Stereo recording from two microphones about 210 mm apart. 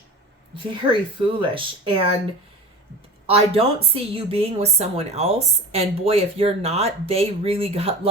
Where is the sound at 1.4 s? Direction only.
25° right (ahead or behind).